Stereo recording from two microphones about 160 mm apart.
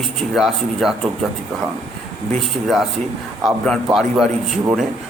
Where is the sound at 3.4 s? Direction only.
5° left (ahead or behind).